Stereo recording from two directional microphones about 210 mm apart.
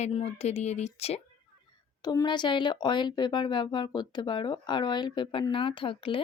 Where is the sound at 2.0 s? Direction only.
20° left (ahead or behind).